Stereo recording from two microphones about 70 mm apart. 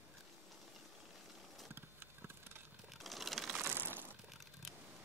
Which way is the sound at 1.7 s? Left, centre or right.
Right.